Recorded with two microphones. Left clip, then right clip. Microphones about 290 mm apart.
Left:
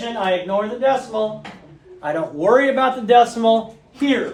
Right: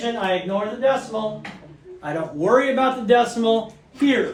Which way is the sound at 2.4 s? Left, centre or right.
Left.